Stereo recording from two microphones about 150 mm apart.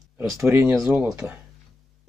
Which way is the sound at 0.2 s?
15° right (ahead or behind).